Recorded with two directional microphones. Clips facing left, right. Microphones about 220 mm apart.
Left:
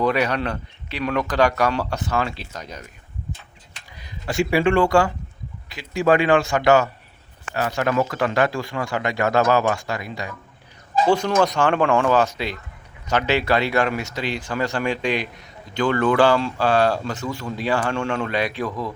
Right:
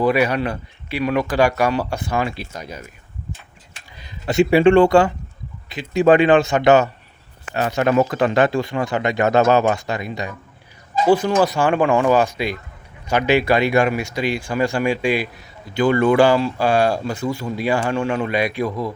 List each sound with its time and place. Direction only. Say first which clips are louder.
0.0 s speech: right 3 dB; 10° right (ahead or behind)
3.9 s a man's voice: right 6 dB; 25° right (ahead or behind)
11.0 s speech: right 3 dB; 5° right (ahead or behind)